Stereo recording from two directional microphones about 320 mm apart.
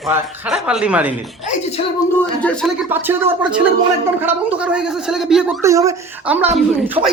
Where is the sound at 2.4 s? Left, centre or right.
Centre.